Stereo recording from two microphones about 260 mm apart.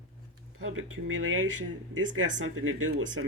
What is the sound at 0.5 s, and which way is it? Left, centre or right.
Speech, right.